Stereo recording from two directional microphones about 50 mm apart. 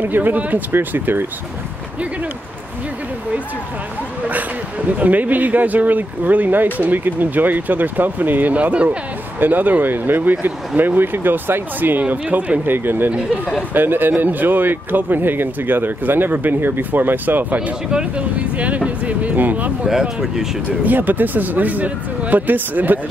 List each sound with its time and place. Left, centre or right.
0.0 s speech: right
4.2 s speech: right
17.9 s speech: right
19.9 s speech: centre
20.8 s speech: right